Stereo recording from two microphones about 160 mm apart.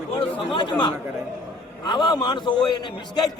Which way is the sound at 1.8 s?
30° left (ahead or behind).